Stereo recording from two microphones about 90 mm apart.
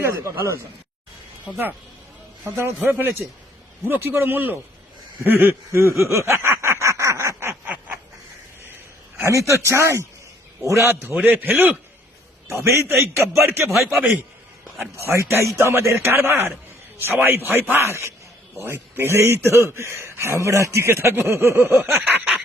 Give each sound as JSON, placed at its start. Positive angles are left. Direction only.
{"t": 0.0, "sound": "speech", "side_deg": -30}
{"t": 2.4, "sound": "a man's voice", "side_deg": -30}
{"t": 5.2, "sound": "snicker", "side_deg": -25}
{"t": 9.2, "sound": "a man's voice", "side_deg": -35}
{"t": 12.5, "sound": "a man's voice", "side_deg": -30}
{"t": 13.7, "sound": "a man's voice", "side_deg": 0}
{"t": 14.9, "sound": "a man's voice", "side_deg": -30}